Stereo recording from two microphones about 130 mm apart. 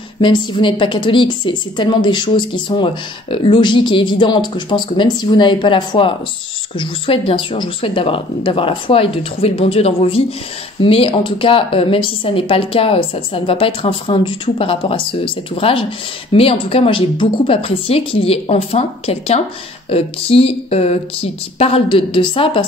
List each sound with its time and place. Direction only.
0.2 s a woman's voice: 40° left (ahead or behind)